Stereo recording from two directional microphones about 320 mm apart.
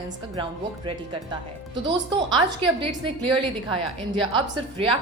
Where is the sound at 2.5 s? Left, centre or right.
Centre.